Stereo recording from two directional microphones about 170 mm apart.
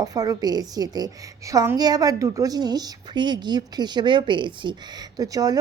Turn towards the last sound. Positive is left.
turn(degrees=-20)  # may be behind; listen again after turning